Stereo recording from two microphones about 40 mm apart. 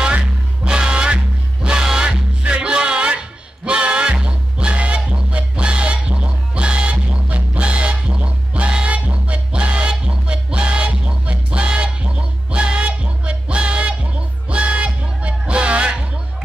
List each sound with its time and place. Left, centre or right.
0.7 s music: right